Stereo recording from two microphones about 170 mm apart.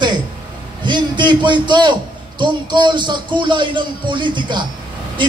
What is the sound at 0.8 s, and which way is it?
A man's voice, 25° right (ahead or behind).